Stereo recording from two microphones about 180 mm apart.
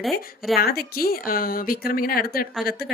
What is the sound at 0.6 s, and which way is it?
A woman's voice, 60° left (ahead or behind).